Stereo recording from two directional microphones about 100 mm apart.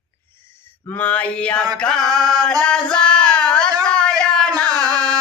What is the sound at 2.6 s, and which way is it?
Singing, 10° left (ahead or behind).